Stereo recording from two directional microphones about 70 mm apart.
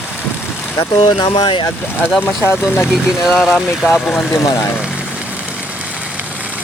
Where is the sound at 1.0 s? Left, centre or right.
Left.